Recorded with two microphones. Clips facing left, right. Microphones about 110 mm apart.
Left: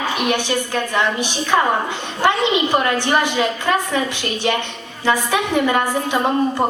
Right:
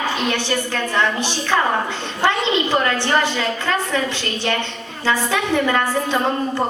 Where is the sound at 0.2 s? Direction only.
15° left (ahead or behind).